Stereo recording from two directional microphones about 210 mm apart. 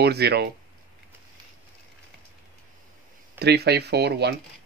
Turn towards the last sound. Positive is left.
turn(degrees=-50)  # may be behind; listen again after turning